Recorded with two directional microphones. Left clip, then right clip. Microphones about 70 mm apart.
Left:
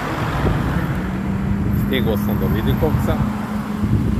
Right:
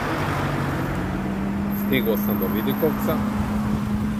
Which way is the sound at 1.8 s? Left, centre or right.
Right.